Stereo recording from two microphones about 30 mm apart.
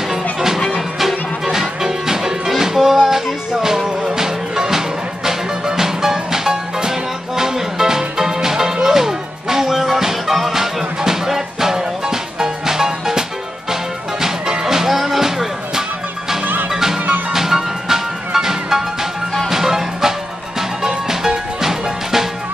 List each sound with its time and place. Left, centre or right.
0.1 s music: centre
14.2 s music: centre
17.3 s music: centre